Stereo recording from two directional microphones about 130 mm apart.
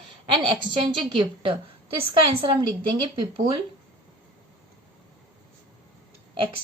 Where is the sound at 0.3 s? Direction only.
40° right (ahead or behind).